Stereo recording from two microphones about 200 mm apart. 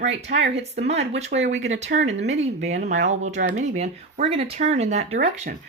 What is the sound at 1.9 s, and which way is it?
Speech, 45° right (ahead or behind).